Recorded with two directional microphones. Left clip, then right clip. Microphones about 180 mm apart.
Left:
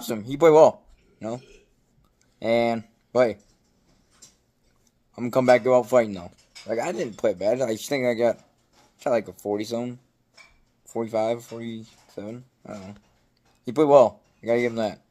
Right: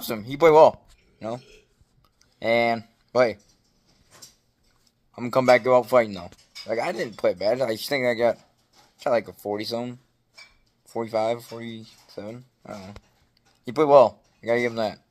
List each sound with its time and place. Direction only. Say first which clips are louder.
0.0 s speech: even; 10° left (ahead or behind)
2.3 s speech: right 1 dB; 5° left (ahead or behind)
5.1 s speech: even; 5° left (ahead or behind)